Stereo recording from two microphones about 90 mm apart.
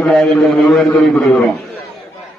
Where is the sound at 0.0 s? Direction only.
5° left (ahead or behind).